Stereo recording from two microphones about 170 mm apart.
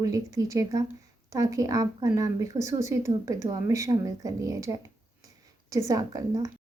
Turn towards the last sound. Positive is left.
turn(degrees=-20)  # may be behind; listen again after turning